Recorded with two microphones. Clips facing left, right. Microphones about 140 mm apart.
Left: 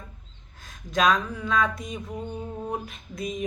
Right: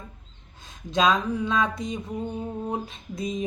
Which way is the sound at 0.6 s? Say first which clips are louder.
Right 1 dB; 25° right (ahead or behind).